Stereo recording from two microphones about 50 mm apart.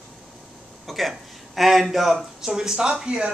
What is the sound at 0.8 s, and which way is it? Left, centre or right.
Speech, centre.